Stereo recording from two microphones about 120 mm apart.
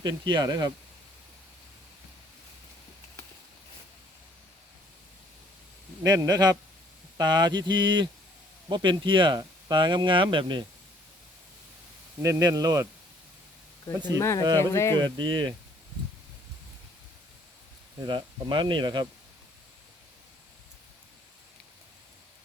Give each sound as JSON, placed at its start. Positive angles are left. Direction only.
{"t": 0.0, "sound": "speech", "side_deg": -35}
{"t": 6.1, "sound": "speech", "side_deg": -30}
{"t": 12.2, "sound": "speech", "side_deg": -30}
{"t": 14.2, "sound": "speech", "side_deg": 25}
{"t": 14.9, "sound": "speech", "side_deg": -40}
{"t": 18.0, "sound": "speech", "side_deg": -40}